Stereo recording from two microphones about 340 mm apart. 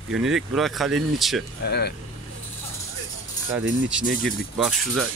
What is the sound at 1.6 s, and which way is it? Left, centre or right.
Speech, left.